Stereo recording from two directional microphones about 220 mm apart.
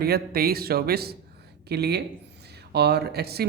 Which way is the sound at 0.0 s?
45° right (ahead or behind).